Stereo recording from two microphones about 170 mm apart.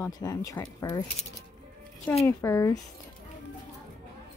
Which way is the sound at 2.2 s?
15° left (ahead or behind).